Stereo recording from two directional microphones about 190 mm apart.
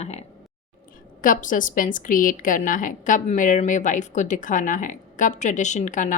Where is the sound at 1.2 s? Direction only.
45° left (ahead or behind).